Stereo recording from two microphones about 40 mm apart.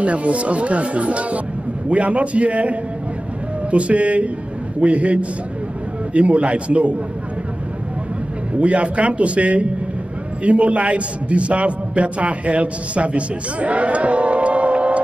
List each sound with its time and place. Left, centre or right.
0.0 s a man's voice: right
8.5 s a man's voice: right